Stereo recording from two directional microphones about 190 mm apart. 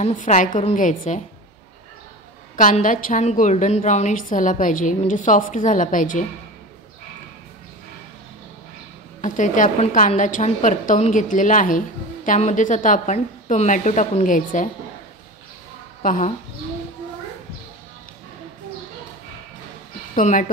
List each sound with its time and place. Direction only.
0.0 s a woman's voice: 40° left (ahead or behind)
2.5 s a woman's voice: 45° left (ahead or behind)
9.2 s a woman's voice: 40° left (ahead or behind)
16.0 s a woman's voice: 45° left (ahead or behind)
20.2 s a woman's voice: 45° left (ahead or behind)